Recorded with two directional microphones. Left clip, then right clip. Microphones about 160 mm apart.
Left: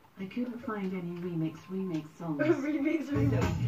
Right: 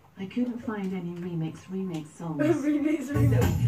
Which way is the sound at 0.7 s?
20° right (ahead or behind).